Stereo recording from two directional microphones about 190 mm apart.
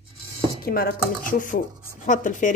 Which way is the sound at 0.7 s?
55° left (ahead or behind).